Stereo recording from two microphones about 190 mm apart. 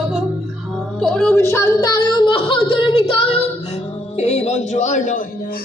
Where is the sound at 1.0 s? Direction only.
Centre (ahead or behind); by 3.0 s 25° left (ahead or behind).